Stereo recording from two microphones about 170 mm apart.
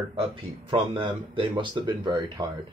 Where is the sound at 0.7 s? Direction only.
30° right (ahead or behind).